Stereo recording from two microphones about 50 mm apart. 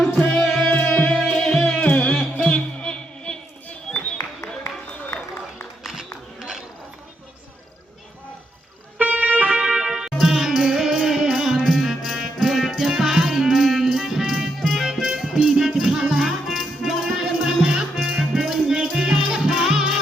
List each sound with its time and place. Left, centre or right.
0.4 s music: centre
0.9 s music: left
1.3 s music: centre
1.7 s music: left
2.4 s a sound: left
5.8 s a sound: centre
9.0 s music: right
9.6 s music: centre